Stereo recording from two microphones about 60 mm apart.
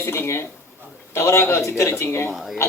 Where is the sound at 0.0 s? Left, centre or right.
Left.